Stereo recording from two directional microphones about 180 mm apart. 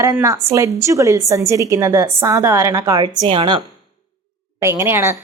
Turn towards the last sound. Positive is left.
turn(degrees=-15)  # may be behind; listen again after turning